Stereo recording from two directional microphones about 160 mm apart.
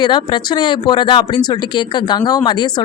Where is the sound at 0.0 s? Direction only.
30° left (ahead or behind).